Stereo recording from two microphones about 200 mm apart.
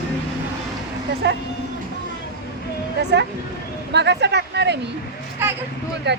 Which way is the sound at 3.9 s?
60° right (ahead or behind).